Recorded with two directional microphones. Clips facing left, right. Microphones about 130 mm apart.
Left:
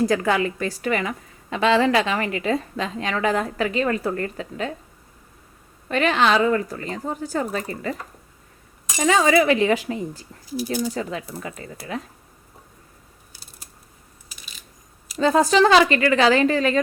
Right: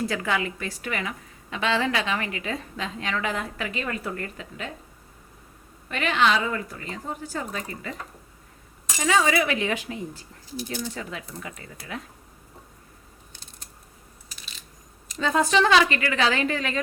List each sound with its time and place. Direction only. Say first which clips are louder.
0.0 s a woman's voice: left 7 dB; 40° left (ahead or behind)
5.9 s a woman's voice: left 4 dB; 40° left (ahead or behind)
9.0 s a woman's voice: left 5 dB; 40° left (ahead or behind)
13.3 s typing: left 2 dB; 5° left (ahead or behind)
15.2 s a woman's voice: left 5 dB; 35° left (ahead or behind)